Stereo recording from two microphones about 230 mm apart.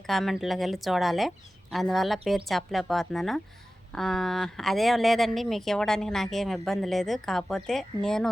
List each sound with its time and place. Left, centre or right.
0.1 s speech: centre